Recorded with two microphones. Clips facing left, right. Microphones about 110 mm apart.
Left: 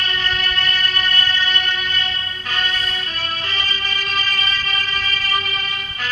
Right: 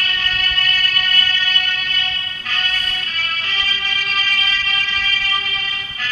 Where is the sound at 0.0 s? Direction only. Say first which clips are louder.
Left 2 dB; 30° left (ahead or behind).